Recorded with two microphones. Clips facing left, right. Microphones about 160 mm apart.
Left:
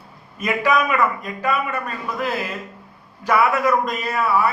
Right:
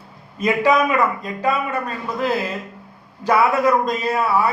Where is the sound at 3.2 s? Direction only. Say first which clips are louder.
Right 2 dB; 30° right (ahead or behind).